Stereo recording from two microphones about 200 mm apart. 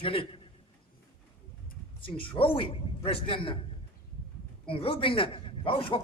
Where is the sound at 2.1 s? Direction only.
25° left (ahead or behind).